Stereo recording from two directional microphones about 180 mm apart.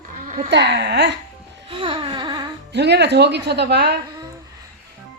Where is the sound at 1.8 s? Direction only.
25° right (ahead or behind).